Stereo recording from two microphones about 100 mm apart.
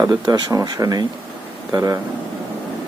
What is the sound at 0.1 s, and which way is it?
Speech, 45° right (ahead or behind).